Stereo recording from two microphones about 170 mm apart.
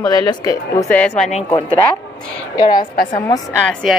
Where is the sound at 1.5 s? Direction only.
25° left (ahead or behind).